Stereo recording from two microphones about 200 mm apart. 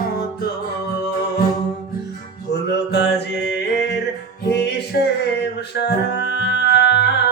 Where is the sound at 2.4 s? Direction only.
55° left (ahead or behind).